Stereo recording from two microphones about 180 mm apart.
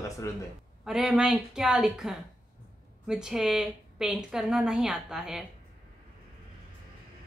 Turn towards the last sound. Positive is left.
turn(degrees=0)  # may be behind; listen again after turning